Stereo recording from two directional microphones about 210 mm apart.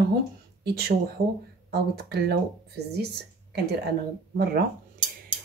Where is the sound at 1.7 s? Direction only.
50° right (ahead or behind).